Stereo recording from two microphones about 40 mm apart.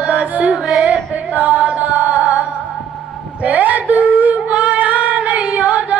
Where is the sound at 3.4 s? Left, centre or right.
Right.